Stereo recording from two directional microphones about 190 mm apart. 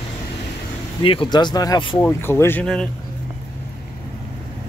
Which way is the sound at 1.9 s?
10° left (ahead or behind).